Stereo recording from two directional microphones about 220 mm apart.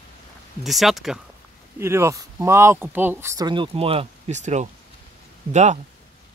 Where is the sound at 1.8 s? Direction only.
10° right (ahead or behind); by 5.8 s 30° right (ahead or behind).